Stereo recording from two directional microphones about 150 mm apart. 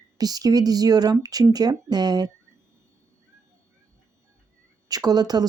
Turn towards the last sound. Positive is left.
turn(degrees=-25)  # may be behind; listen again after turning